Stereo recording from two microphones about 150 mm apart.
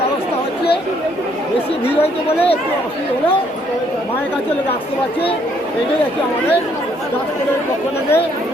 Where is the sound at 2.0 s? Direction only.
40° left (ahead or behind).